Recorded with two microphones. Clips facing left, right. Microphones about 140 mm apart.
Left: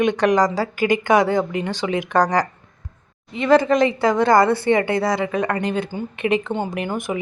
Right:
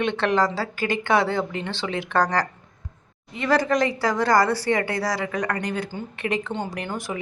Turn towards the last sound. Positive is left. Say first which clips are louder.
# left 5 dB
turn(degrees=15)  # may be behind; listen again after turning